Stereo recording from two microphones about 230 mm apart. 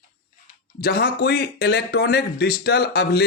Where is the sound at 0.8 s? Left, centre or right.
Left.